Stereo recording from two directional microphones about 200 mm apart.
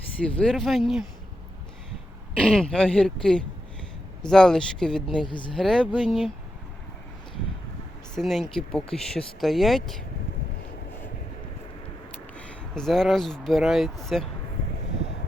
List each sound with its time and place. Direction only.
0.3 s speech: 5° left (ahead or behind)
2.4 s speech: 5° left (ahead or behind)
5.2 s speech: 25° left (ahead or behind)
5.5 s speech: centre (ahead or behind)
8.1 s speech: centre (ahead or behind)
12.4 s speech: 5° left (ahead or behind)